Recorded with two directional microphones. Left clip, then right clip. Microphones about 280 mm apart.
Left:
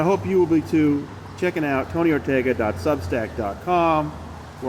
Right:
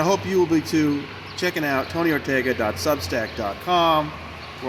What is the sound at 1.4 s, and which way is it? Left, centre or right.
Speech, right.